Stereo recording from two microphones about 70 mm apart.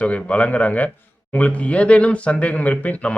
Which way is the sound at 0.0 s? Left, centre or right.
Centre.